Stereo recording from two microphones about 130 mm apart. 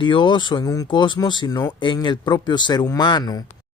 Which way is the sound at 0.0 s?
40° left (ahead or behind).